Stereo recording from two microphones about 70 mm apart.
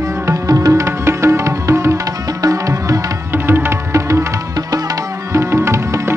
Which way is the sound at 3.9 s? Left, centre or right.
Right.